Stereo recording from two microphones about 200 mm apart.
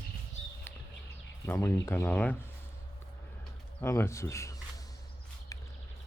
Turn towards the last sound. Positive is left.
turn(degrees=15)  # may be behind; listen again after turning